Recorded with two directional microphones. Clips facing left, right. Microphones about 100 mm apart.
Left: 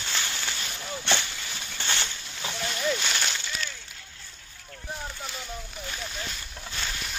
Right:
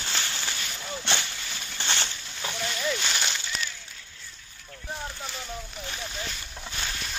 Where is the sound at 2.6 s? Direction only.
5° left (ahead or behind).